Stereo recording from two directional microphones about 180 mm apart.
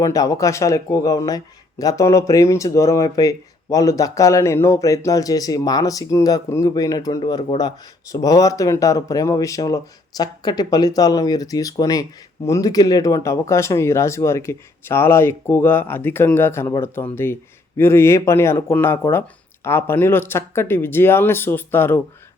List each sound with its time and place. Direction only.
0.0 s speech: 20° left (ahead or behind)